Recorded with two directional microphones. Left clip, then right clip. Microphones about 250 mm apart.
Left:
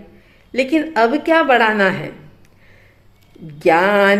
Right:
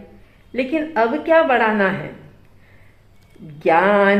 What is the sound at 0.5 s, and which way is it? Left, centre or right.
Mantra, left.